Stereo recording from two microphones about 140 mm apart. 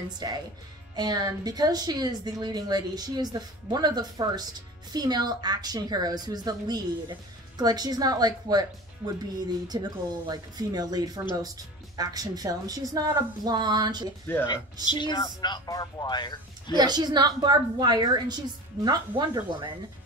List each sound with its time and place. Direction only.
0.2 s a woman's voice: 30° right (ahead or behind)
14.2 s speech: 15° left (ahead or behind)
14.9 s speech: 30° left (ahead or behind)
16.7 s a woman's voice: 30° right (ahead or behind)